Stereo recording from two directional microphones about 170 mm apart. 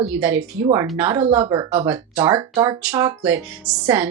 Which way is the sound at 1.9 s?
10° right (ahead or behind).